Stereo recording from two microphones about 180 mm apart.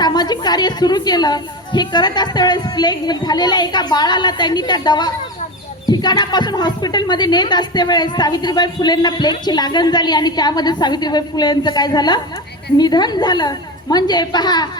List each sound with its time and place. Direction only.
0.0 s a woman's voice: 20° left (ahead or behind)